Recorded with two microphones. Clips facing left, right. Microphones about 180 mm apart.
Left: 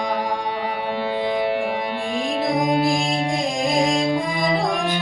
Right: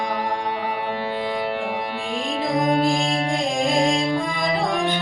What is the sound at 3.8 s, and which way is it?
Music, 15° left (ahead or behind).